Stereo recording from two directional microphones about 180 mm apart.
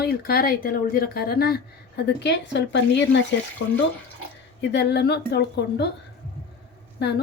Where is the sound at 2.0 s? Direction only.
70° left (ahead or behind).